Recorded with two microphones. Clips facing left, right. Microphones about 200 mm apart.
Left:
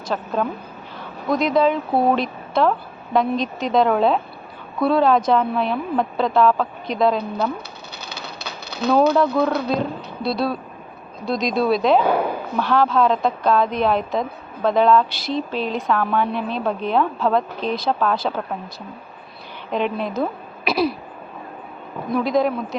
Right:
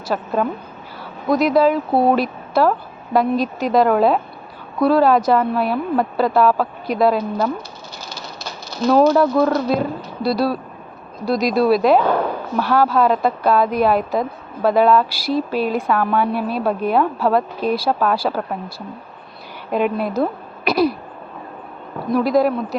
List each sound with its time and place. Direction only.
0.1 s a woman's voice: 5° right (ahead or behind)
1.3 s a woman's voice: 5° right (ahead or behind)
8.0 s a sound: 65° left (ahead or behind)
9.1 s a woman's voice: 5° right (ahead or behind)
12.0 s a sound: 10° left (ahead or behind)
12.5 s a woman's voice: 10° right (ahead or behind)
19.7 s a woman's voice: 5° right (ahead or behind)
20.7 s throat clearing: centre (ahead or behind)
22.1 s a woman's voice: 5° right (ahead or behind)